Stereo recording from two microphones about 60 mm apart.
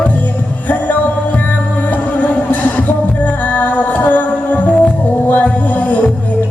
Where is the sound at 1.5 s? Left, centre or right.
Left.